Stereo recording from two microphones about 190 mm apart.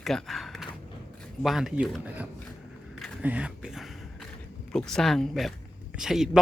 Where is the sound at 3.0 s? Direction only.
5° right (ahead or behind).